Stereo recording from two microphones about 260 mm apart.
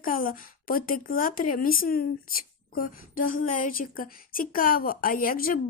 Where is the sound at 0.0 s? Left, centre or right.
Left.